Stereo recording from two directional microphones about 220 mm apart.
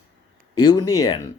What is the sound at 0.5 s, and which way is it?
Speech, 15° left (ahead or behind).